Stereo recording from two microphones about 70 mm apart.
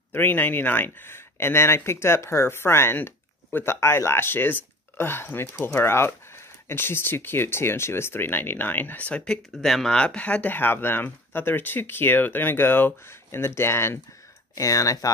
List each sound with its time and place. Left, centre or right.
0.1 s speech: left; by 9.4 s centre
9.5 s speech: centre
9.8 s speech: centre; by 13.9 s left
14.5 s speech: left